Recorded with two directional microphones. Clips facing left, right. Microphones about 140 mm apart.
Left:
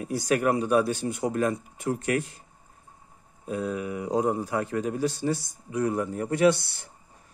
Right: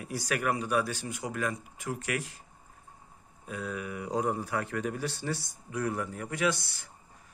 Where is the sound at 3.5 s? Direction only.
30° left (ahead or behind).